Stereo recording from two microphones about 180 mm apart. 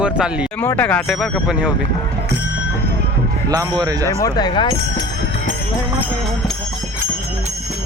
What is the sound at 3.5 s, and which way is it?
Speech, 20° right (ahead or behind).